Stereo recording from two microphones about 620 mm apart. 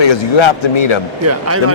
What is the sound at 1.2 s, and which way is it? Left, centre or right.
Speech, right.